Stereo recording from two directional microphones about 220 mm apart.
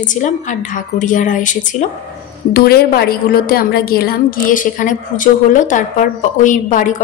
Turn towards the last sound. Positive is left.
turn(degrees=35)  # may be behind; listen again after turning